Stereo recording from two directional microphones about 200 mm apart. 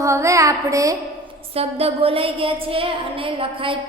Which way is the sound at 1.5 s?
30° right (ahead or behind).